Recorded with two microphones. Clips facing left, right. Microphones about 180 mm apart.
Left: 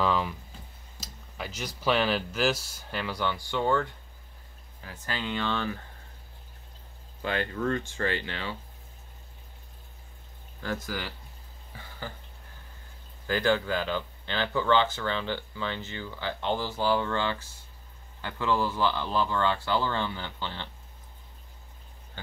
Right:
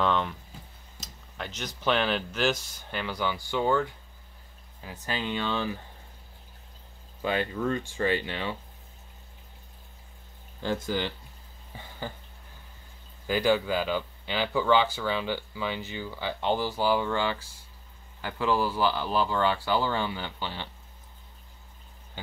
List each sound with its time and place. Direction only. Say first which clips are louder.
0.0 s speech: even; 5° left (ahead or behind)
1.0 s a sound: even; 5° left (ahead or behind)
1.8 s speech: even; centre (ahead or behind)
4.8 s speech: right 2 dB; 20° right (ahead or behind)
7.2 s speech: right 2 dB; 10° right (ahead or behind)
10.6 s speech: right 5 dB; 25° right (ahead or behind)
11.7 s a sound: right 3 dB; 20° right (ahead or behind)
13.3 s speech: right 1 dB; 15° right (ahead or behind)